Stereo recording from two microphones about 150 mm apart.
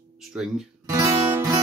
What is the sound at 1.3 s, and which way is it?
Music, 20° right (ahead or behind).